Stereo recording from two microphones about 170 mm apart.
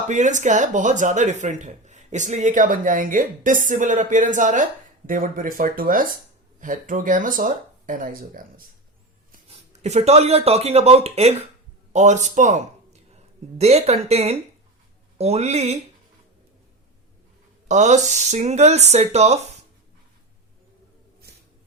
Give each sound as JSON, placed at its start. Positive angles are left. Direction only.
{"t": 0.1, "sound": "speech", "side_deg": -45}
{"t": 9.5, "sound": "speech", "side_deg": -40}
{"t": 17.7, "sound": "speech", "side_deg": -45}